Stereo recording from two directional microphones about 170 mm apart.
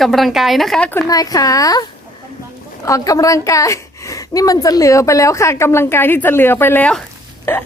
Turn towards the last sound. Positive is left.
turn(degrees=15)  # may be behind; listen again after turning